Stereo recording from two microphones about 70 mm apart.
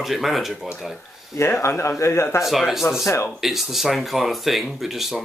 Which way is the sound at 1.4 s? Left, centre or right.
Left.